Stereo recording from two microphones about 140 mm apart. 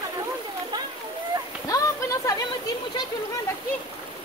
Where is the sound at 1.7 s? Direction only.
25° left (ahead or behind).